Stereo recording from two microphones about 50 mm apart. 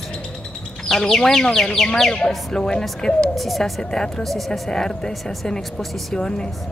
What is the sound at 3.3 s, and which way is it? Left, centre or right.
Speech, centre.